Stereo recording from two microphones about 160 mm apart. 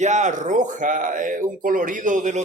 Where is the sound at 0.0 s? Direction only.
50° right (ahead or behind).